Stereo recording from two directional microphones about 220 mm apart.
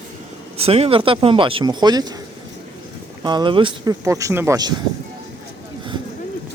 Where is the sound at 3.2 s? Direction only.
20° right (ahead or behind).